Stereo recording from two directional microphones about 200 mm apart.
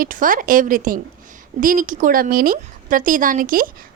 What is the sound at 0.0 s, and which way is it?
A woman's voice, 45° right (ahead or behind).